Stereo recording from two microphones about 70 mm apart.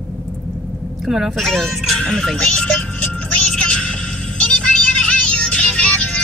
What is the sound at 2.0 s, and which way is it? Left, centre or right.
Music, centre.